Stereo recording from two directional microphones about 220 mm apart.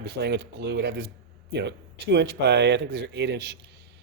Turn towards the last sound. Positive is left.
turn(degrees=-50)  # may be behind; listen again after turning